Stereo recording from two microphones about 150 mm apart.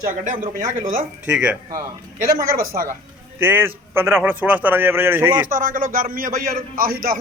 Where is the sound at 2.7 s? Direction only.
65° right (ahead or behind).